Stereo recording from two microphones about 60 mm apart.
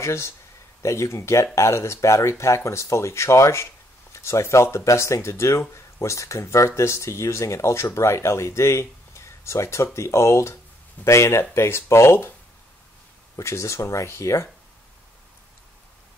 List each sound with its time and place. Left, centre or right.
0.0 s speech: left
13.4 s speech: left